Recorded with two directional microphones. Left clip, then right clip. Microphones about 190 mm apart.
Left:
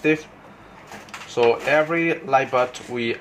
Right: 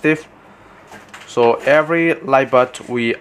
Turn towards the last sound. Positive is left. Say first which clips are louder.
# right 6 dB
turn(degrees=-50)  # may be behind; listen again after turning